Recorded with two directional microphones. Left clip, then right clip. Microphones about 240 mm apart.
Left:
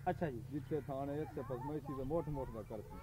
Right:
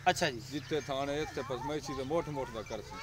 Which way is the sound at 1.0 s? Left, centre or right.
Centre.